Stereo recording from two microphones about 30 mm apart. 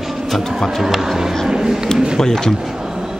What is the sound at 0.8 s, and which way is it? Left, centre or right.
Speech, centre.